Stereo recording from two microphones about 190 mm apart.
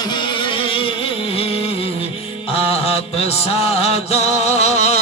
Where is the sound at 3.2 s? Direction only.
35° left (ahead or behind).